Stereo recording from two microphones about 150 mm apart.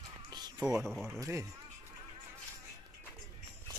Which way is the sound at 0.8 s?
Centre (ahead or behind).